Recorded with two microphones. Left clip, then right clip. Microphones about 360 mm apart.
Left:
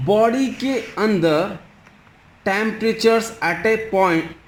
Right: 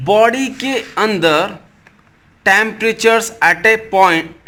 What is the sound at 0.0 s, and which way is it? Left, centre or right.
Speech, right.